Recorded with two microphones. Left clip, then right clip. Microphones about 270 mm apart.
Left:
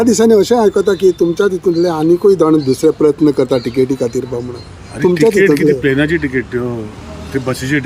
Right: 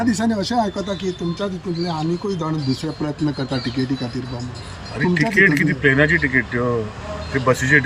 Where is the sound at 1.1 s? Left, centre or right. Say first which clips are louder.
Left 14 dB; left.